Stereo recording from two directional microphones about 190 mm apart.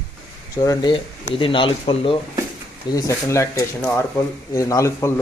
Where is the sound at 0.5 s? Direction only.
20° left (ahead or behind).